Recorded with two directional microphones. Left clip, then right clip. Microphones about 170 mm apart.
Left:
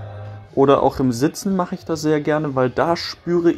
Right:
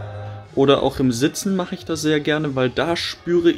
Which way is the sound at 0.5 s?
Centre (ahead or behind).